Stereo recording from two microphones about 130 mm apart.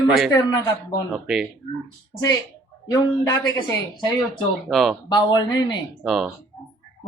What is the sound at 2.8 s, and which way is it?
Speech, 30° left (ahead or behind).